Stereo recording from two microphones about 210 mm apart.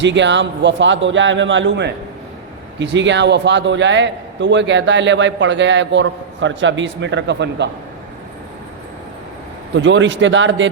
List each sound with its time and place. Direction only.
0.0 s a man's voice: 60° right (ahead or behind)
9.7 s a man's voice: 60° right (ahead or behind)